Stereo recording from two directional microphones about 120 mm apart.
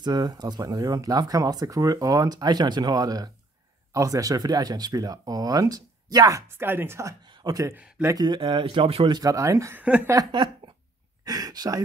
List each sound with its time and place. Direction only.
0.0 s speech: 35° right (ahead or behind)
6.5 s speech: 20° right (ahead or behind)
7.2 s a sound: 40° right (ahead or behind)
7.7 s speech: 15° right (ahead or behind)
8.1 s speech: 35° right (ahead or behind)
9.8 s speech: 10° right (ahead or behind)
10.6 s dog: 40° right (ahead or behind)
11.2 s speech: 30° right (ahead or behind)